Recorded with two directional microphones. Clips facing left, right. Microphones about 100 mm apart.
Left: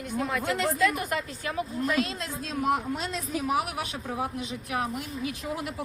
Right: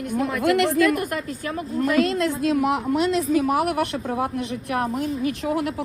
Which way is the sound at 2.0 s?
60° right (ahead or behind).